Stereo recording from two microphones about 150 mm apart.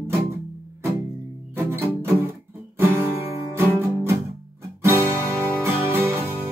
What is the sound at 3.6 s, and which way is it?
Music, 15° right (ahead or behind).